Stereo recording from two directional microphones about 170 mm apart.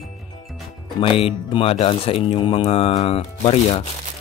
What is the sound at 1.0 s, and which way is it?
Speech, 30° left (ahead or behind).